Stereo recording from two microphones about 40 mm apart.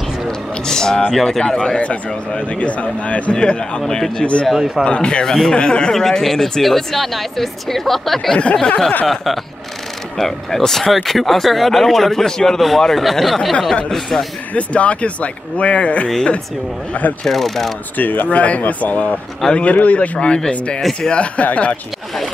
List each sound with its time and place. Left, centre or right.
0.7 s a sound: centre
1.1 s speech: centre
1.4 s speech: left
5.2 s speech: centre
5.5 s speech: left
5.9 s speech: centre
8.5 s speech: centre
9.0 s speech: centre
14.5 s speech: left
17.2 s speech: centre
17.9 s speech: left